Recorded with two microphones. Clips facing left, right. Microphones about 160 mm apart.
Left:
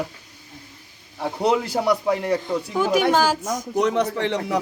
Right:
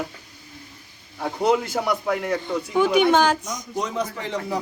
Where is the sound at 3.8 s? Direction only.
70° left (ahead or behind).